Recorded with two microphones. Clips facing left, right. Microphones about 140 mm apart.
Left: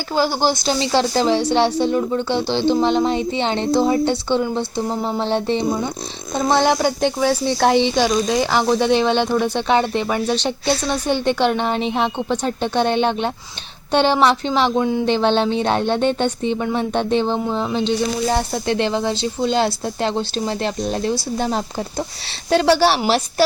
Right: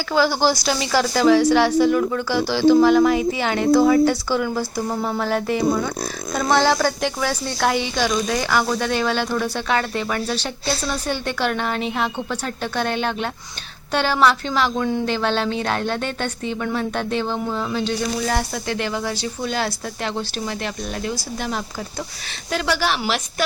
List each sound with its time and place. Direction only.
0.1 s speech: 45° left (ahead or behind)
0.3 s a woman's voice: 20° left (ahead or behind)